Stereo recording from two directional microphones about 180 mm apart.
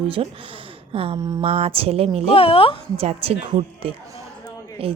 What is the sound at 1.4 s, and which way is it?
Speech, 35° right (ahead or behind).